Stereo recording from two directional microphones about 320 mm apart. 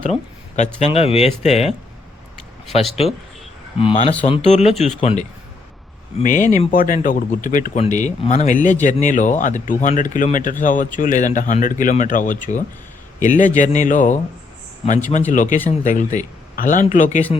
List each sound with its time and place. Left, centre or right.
0.0 s a sound: left
0.8 s speech: centre
2.7 s speech: centre